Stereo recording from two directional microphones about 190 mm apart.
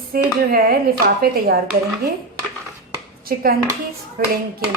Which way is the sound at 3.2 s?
50° right (ahead or behind).